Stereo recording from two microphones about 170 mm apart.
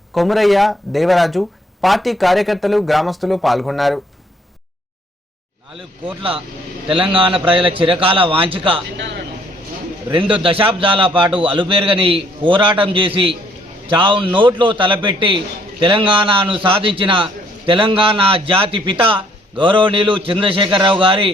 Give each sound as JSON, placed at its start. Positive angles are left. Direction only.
{"t": 0.1, "sound": "speech", "side_deg": 0}
{"t": 6.8, "sound": "a man's voice", "side_deg": -30}
{"t": 10.1, "sound": "a man's voice", "side_deg": -30}